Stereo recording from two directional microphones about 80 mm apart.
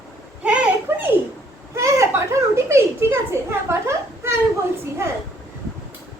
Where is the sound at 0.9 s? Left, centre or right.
Right.